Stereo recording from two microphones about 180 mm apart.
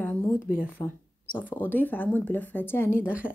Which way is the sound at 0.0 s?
10° left (ahead or behind).